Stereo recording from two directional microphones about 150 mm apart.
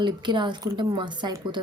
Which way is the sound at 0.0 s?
30° right (ahead or behind).